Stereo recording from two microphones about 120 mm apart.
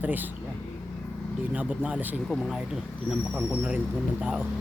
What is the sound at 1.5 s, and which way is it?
Speech, 10° right (ahead or behind).